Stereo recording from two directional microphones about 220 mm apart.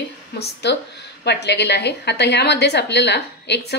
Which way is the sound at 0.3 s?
50° left (ahead or behind).